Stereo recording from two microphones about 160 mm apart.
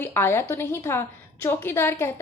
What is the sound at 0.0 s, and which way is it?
A woman's voice, 15° left (ahead or behind).